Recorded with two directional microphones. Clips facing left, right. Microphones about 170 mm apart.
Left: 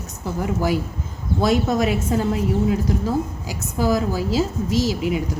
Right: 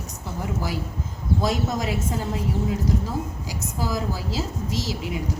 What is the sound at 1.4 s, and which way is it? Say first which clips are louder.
Speech: left 8 dB; 70° left (ahead or behind).